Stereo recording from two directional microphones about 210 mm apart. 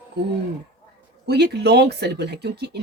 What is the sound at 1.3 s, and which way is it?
Speech, 55° right (ahead or behind).